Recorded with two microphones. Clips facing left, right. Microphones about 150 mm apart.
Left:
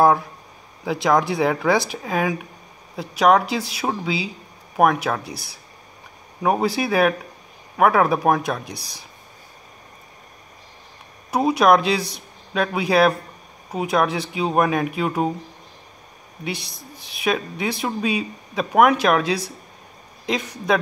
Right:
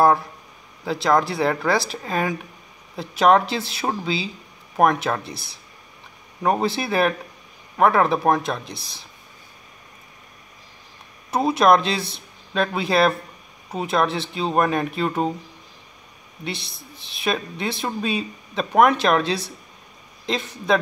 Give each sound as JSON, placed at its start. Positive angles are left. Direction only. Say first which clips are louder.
{"t": 0.9, "sound": "speech", "louder": "left 1 dB", "side_deg": 15}
{"t": 11.2, "sound": "speech", "louder": "left 1 dB", "side_deg": 10}
{"t": 16.4, "sound": "speech", "louder": "left 2 dB", "side_deg": 10}